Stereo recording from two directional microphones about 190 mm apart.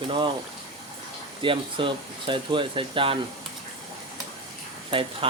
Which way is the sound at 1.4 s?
25° right (ahead or behind).